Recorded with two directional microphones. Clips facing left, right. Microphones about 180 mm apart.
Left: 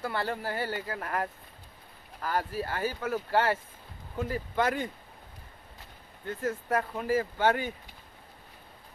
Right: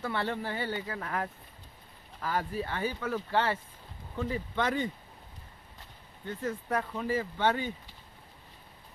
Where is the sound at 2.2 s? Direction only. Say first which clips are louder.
Left 1 dB; centre (ahead or behind).